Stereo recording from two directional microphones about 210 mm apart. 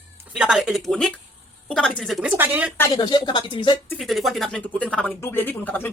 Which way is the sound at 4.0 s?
Centre (ahead or behind).